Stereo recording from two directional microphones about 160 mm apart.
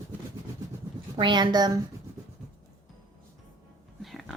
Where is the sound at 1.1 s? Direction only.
30° right (ahead or behind).